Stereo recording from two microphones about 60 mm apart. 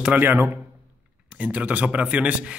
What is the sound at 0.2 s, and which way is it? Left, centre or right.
Speech, right.